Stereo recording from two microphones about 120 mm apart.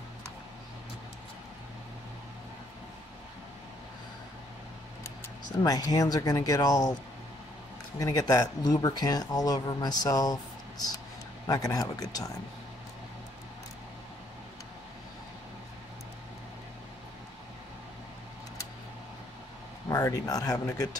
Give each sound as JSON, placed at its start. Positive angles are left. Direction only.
{"t": 5.6, "sound": "speech", "side_deg": 30}
{"t": 8.0, "sound": "speech", "side_deg": 30}
{"t": 19.9, "sound": "speech", "side_deg": 30}